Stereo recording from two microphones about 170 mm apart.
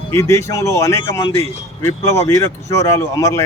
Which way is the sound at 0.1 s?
15° left (ahead or behind).